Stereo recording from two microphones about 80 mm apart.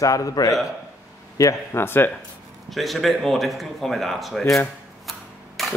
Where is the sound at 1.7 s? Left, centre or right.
Left.